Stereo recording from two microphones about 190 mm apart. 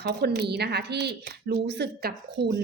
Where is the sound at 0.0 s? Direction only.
55° right (ahead or behind).